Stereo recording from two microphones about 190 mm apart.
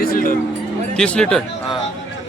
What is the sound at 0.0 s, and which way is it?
Speech, 50° left (ahead or behind).